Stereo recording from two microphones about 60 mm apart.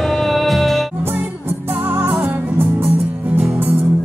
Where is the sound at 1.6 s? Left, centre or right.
Right.